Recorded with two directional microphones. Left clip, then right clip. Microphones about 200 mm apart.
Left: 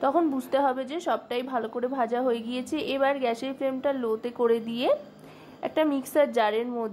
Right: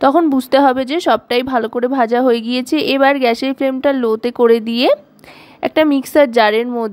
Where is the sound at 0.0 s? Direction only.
45° right (ahead or behind).